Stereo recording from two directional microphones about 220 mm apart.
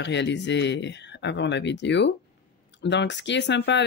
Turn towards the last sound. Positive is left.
turn(degrees=55)  # may be behind; listen again after turning